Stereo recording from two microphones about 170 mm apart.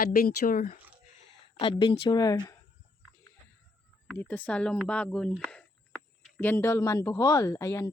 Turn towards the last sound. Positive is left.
turn(degrees=15)  # may be behind; listen again after turning